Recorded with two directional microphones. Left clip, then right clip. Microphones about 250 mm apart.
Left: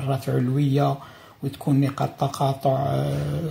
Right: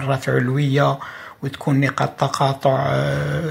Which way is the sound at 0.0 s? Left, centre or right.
Centre.